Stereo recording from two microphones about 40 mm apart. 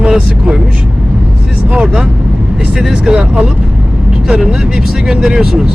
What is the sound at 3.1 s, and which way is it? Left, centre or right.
Speech, right.